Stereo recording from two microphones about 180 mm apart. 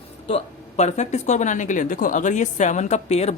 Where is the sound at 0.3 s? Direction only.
35° left (ahead or behind).